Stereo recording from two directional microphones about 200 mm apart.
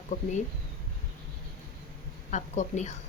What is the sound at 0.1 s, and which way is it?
Speech, 40° left (ahead or behind).